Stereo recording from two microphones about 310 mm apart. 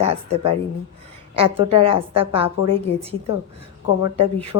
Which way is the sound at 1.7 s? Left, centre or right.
Centre.